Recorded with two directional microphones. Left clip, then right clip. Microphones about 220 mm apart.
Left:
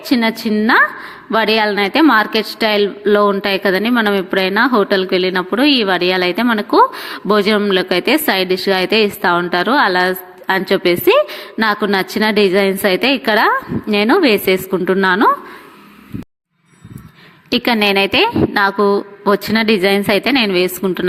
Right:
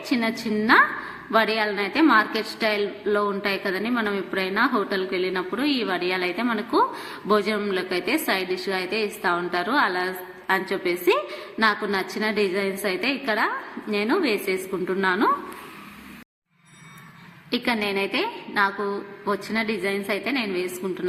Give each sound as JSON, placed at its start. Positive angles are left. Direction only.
{"t": 0.1, "sound": "a woman's voice", "side_deg": 35}
{"t": 17.5, "sound": "a woman's voice", "side_deg": 40}